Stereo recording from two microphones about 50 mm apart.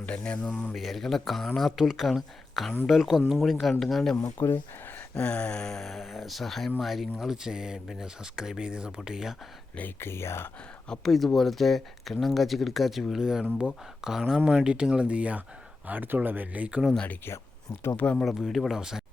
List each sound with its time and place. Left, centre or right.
0.0 s speech: left
0.8 s speech: centre
1.7 s speech: centre
4.4 s speech: left
5.1 s speech: left; by 9.3 s centre
10.0 s speech: left
11.0 s speech: centre
13.2 s speech: centre; by 16.5 s right
16.5 s speech: right
17.2 s speech: left
17.9 s speech: left
18.3 s speech: centre
18.8 s speech: centre